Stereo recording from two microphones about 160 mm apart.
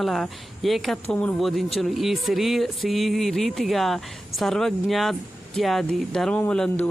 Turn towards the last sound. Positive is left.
turn(degrees=5)  # may be behind; listen again after turning